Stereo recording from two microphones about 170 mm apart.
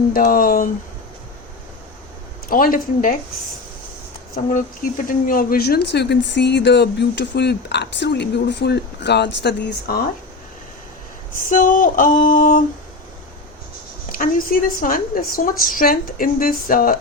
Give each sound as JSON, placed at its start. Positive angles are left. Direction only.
{"t": 0.1, "sound": "a woman's voice", "side_deg": 55}
{"t": 2.5, "sound": "a woman's voice", "side_deg": 55}
{"t": 4.5, "sound": "speech", "side_deg": 50}
{"t": 11.4, "sound": "female singing", "side_deg": 50}
{"t": 14.1, "sound": "a woman's voice", "side_deg": 55}